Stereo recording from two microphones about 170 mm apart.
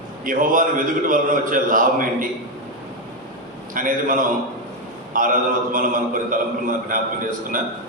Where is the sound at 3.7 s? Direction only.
55° right (ahead or behind).